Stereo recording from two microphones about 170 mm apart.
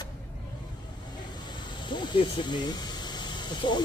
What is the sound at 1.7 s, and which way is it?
Speech, 25° left (ahead or behind).